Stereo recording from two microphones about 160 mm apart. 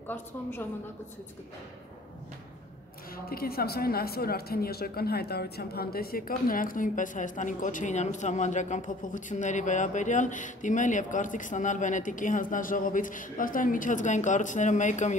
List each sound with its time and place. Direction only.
0.1 s a woman's voice: 15° left (ahead or behind)
3.3 s a woman's voice: 70° left (ahead or behind); by 15.1 s 50° left (ahead or behind)